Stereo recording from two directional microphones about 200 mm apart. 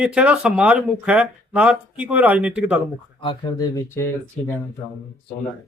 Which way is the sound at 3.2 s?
20° left (ahead or behind).